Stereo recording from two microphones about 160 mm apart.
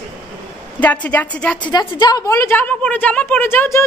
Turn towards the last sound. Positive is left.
turn(degrees=15)  # may be behind; listen again after turning